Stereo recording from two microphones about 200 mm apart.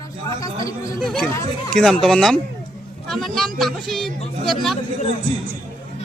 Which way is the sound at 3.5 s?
Centre (ahead or behind).